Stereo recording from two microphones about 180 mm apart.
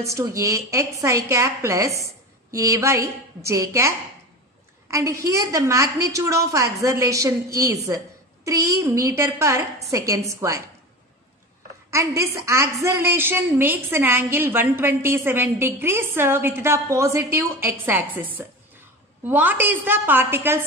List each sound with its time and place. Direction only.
0.0 s a woman's voice: 15° right (ahead or behind)
11.9 s a woman's voice: 15° right (ahead or behind)
19.2 s a woman's voice: 10° right (ahead or behind)